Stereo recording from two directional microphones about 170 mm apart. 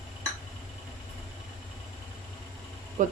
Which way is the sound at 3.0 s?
50° right (ahead or behind).